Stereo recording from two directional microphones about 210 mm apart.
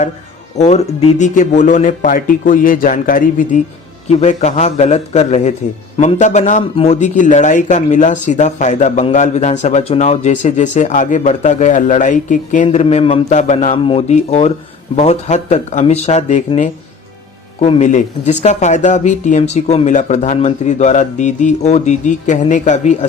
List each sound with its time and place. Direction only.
0.5 s a man's voice: 30° left (ahead or behind)